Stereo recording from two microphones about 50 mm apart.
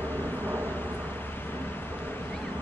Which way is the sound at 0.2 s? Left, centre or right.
Left.